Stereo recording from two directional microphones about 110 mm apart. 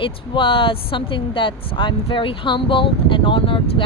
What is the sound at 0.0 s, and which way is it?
Speech, 50° left (ahead or behind).